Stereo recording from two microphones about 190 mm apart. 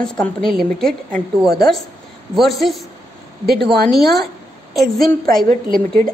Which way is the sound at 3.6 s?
55° right (ahead or behind).